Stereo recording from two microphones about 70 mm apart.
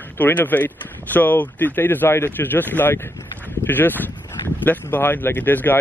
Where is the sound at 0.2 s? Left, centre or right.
Left.